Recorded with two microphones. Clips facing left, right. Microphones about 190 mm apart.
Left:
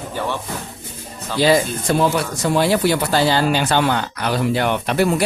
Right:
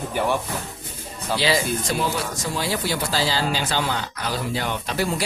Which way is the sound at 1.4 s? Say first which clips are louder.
Left 8 dB; 55° left (ahead or behind).